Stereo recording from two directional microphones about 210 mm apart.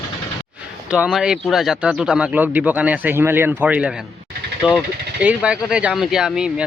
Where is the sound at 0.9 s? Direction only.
5° right (ahead or behind).